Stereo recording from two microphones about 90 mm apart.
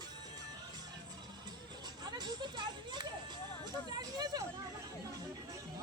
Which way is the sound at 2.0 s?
50° right (ahead or behind).